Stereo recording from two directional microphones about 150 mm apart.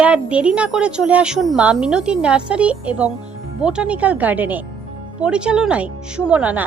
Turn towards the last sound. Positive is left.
turn(degrees=-10)  # may be behind; listen again after turning